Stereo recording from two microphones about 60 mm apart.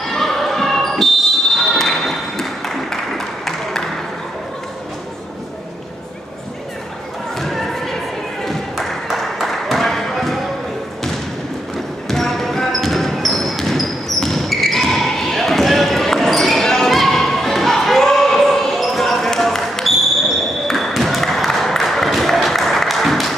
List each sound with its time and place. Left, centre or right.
0.0 s basketball bounce: centre
7.3 s thump: centre
8.5 s a sound: centre
12.1 s basketball bounce: centre